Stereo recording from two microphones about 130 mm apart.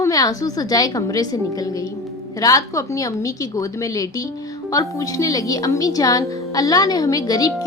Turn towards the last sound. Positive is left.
turn(degrees=30)  # may be behind; listen again after turning